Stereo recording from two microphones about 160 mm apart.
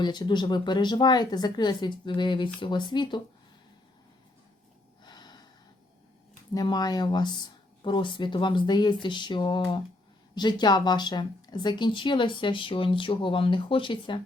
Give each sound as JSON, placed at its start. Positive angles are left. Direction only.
{"t": 0.0, "sound": "speech", "side_deg": 25}
{"t": 5.0, "sound": "gasp", "side_deg": 25}
{"t": 6.5, "sound": "speech", "side_deg": 25}